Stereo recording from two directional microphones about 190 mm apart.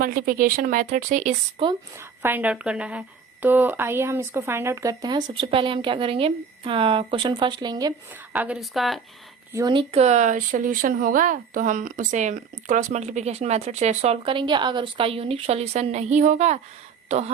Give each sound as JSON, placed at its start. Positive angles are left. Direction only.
{"t": 0.0, "sound": "speech", "side_deg": -50}
{"t": 2.2, "sound": "a woman's voice", "side_deg": -10}
{"t": 8.3, "sound": "a woman's voice", "side_deg": -5}
{"t": 9.5, "sound": "speech", "side_deg": -15}
{"t": 9.7, "sound": "speech", "side_deg": -35}